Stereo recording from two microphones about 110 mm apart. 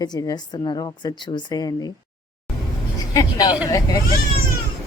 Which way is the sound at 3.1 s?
35° left (ahead or behind).